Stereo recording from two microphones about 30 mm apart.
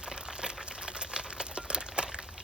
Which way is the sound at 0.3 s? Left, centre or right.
Right.